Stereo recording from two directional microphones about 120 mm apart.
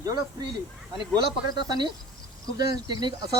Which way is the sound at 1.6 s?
35° right (ahead or behind).